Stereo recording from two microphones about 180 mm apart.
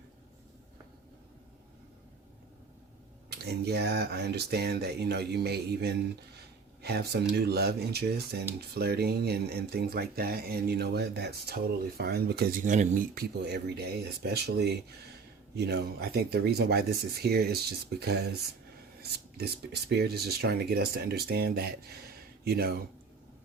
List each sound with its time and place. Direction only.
3.2 s speech: 65° right (ahead or behind)
19.4 s speech: 65° right (ahead or behind)